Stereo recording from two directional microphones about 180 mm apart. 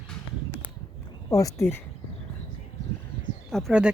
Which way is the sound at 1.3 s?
20° left (ahead or behind).